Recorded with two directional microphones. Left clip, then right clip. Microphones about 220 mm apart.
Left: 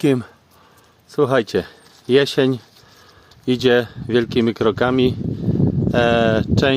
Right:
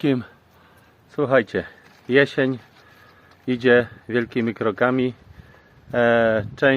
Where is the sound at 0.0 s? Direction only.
45° left (ahead or behind).